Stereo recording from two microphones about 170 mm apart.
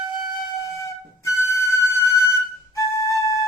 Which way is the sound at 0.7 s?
15° left (ahead or behind).